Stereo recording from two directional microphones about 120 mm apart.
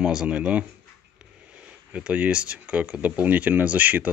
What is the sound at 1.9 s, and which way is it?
Speech, 10° right (ahead or behind).